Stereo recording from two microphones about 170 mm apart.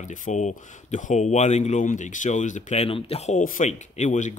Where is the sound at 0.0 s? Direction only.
50° left (ahead or behind).